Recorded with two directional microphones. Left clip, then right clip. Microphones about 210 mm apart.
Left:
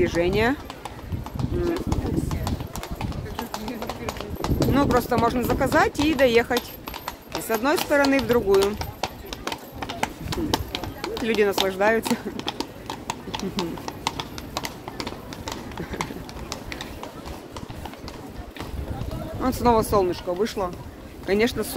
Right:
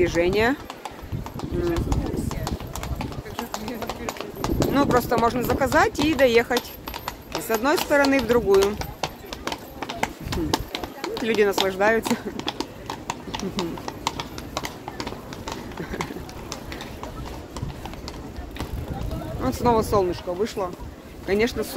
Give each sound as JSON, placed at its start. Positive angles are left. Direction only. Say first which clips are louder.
{"t": 0.0, "sound": "speech", "louder": "right 1 dB", "side_deg": 0}
{"t": 1.7, "sound": "clip-clop", "louder": "even", "side_deg": -10}
{"t": 4.7, "sound": "speech", "louder": "right 1 dB", "side_deg": 0}
{"t": 6.5, "sound": "speech", "louder": "right 1 dB", "side_deg": -5}
{"t": 8.7, "sound": "horse", "louder": "even", "side_deg": 10}
{"t": 9.8, "sound": "clip-clop", "louder": "even", "side_deg": 10}
{"t": 11.2, "sound": "speech", "louder": "right 1 dB", "side_deg": 0}
{"t": 12.0, "sound": "clip-clop", "louder": "right 1 dB", "side_deg": 20}
{"t": 14.5, "sound": "run", "louder": "even", "side_deg": 45}
{"t": 16.0, "sound": "a sound", "louder": "even", "side_deg": 30}
{"t": 19.4, "sound": "speech", "louder": "left 1 dB", "side_deg": 20}